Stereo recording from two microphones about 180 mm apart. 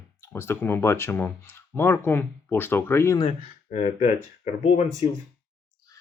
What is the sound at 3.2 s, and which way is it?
Speech, 35° left (ahead or behind).